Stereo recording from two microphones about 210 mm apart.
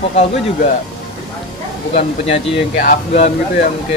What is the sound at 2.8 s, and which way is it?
Speech, 30° left (ahead or behind).